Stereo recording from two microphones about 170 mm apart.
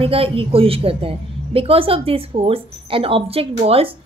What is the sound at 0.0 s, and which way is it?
A woman's voice, 35° right (ahead or behind).